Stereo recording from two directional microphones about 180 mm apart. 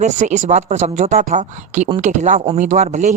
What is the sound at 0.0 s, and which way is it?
Speech, 40° right (ahead or behind).